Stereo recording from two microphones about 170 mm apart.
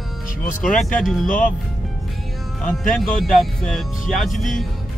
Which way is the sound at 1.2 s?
55° left (ahead or behind).